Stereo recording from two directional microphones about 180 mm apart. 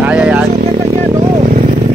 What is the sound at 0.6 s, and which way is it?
Speech, 40° right (ahead or behind).